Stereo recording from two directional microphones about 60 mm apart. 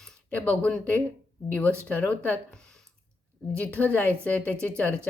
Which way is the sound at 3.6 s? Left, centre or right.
Left.